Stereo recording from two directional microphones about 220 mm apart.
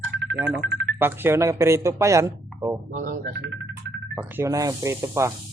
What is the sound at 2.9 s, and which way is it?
Speech, 40° right (ahead or behind).